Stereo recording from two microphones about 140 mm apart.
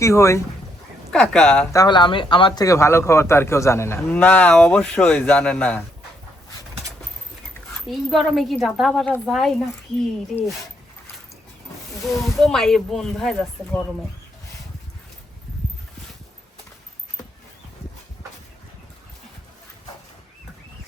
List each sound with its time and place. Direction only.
0.0 s speech: 20° left (ahead or behind)
1.1 s a man's voice: 5° left (ahead or behind)
1.7 s speech: 30° left (ahead or behind)
2.6 s a man's voice: 20° left (ahead or behind)
7.9 s speech: centre (ahead or behind)
12.2 s a man's voice: centre (ahead or behind)